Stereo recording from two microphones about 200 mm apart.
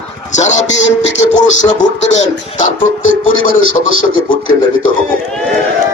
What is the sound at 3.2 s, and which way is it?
Speech, 40° left (ahead or behind).